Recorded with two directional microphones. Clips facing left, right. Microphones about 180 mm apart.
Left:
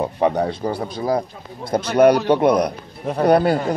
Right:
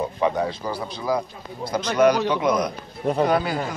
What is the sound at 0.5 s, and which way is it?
Speech, 55° left (ahead or behind).